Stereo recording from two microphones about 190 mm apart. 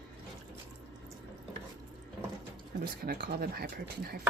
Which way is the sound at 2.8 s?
55° right (ahead or behind).